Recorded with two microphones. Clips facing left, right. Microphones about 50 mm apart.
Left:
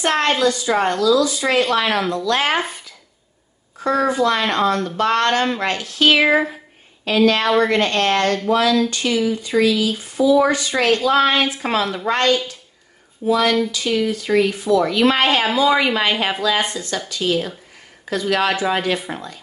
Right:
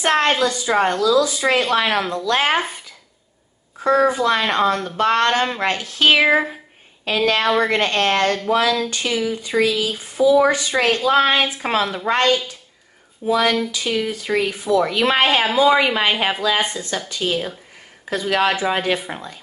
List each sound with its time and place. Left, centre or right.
0.0 s speech: right
3.9 s speech: centre
7.4 s speech: centre
7.7 s speech: right
19.0 s speech: centre